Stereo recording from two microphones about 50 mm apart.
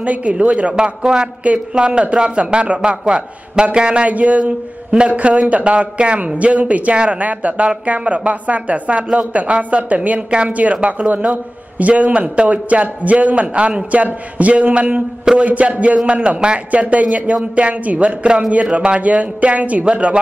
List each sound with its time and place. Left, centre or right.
0.0 s a man's voice: right